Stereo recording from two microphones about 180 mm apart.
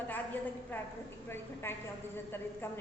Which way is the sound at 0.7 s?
10° left (ahead or behind).